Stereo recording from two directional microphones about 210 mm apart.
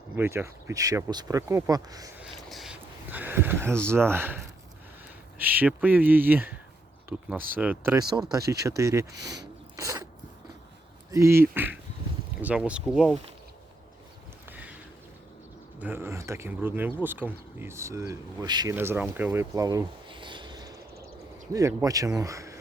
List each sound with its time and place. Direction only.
0.2 s speech: 10° right (ahead or behind)
2.2 s a sound: centre (ahead or behind)
3.8 s speech: 10° right (ahead or behind)
5.4 s speech: 10° right (ahead or behind)
9.7 s a sound: 15° right (ahead or behind)
11.1 s speech: 15° right (ahead or behind)
14.5 s boat: 5° right (ahead or behind)
15.8 s speech: 10° right (ahead or behind)